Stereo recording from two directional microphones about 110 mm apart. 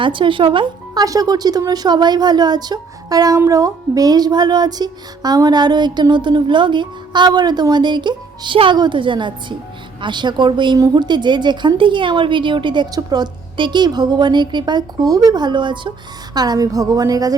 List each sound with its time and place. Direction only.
0.0 s a woman's voice: 50° right (ahead or behind)
1.0 s a woman's voice: 35° right (ahead or behind)